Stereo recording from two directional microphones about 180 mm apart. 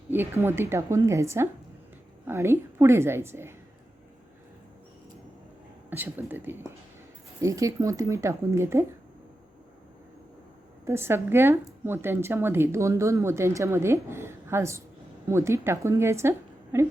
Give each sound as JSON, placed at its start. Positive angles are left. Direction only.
{"t": 0.1, "sound": "speech", "side_deg": -10}
{"t": 5.9, "sound": "speech", "side_deg": -10}
{"t": 10.8, "sound": "speech", "side_deg": -15}